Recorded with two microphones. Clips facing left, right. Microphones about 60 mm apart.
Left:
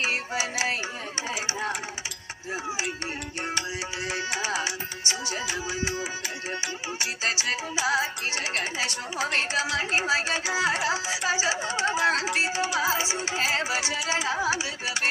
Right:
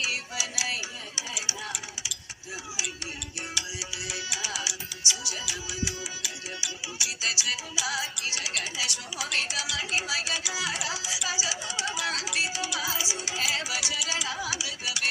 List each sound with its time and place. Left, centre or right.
0.0 s music: left
4.0 s music: left